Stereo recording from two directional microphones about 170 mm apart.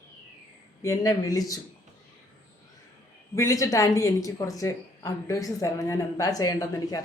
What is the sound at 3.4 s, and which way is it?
A woman's voice, 20° left (ahead or behind).